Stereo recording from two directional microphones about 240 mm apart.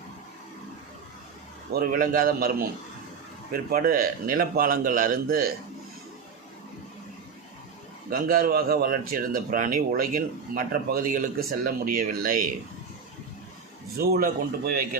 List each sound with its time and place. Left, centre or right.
1.7 s speech: right
3.7 s speech: right
8.1 s speech: right
13.9 s speech: right